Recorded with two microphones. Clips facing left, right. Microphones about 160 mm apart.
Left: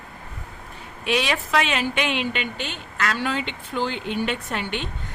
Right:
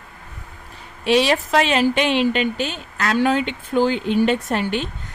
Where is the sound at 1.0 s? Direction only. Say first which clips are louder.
Right 7 dB; 30° right (ahead or behind).